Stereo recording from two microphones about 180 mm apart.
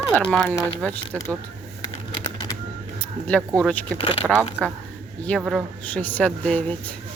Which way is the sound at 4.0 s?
30° left (ahead or behind).